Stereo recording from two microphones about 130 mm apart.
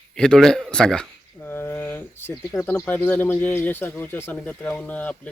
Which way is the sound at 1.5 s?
15° left (ahead or behind).